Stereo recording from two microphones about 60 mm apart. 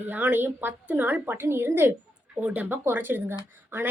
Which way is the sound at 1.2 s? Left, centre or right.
Right.